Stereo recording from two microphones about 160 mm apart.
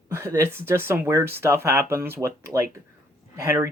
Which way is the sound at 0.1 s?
15° right (ahead or behind).